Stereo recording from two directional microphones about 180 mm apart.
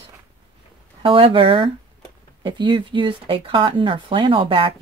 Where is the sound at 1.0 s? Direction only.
30° right (ahead or behind).